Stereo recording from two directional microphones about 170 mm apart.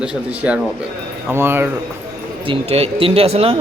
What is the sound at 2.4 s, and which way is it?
Speech, 35° right (ahead or behind).